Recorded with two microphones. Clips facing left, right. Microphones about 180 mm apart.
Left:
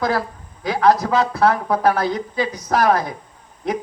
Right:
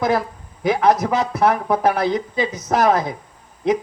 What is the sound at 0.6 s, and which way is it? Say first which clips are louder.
Speech: even; 20° right (ahead or behind).